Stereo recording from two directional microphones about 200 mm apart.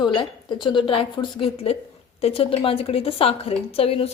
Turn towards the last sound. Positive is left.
turn(degrees=30)  # may be behind; listen again after turning